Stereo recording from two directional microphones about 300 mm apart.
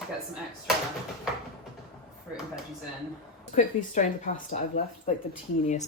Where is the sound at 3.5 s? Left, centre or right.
Left.